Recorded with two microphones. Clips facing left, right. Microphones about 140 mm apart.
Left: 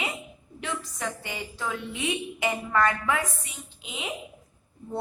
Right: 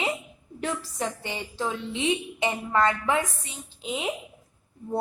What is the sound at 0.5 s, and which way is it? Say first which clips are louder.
Speech: right 3 dB; 40° right (ahead or behind).